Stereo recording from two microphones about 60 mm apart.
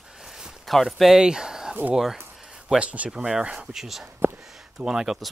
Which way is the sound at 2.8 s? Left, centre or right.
Right.